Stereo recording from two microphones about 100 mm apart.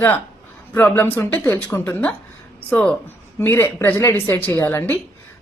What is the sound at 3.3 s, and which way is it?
A woman's voice, 25° left (ahead or behind).